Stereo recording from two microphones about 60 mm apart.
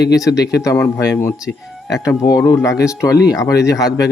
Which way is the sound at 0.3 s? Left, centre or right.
Left.